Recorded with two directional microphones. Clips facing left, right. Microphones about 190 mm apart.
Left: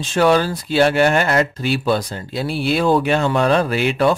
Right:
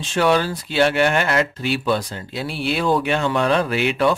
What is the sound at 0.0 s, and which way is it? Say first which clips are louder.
A man's voice: left 3 dB; 40° left (ahead or behind).